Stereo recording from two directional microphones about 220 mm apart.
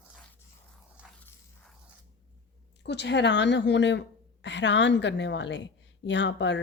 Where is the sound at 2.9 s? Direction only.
50° left (ahead or behind).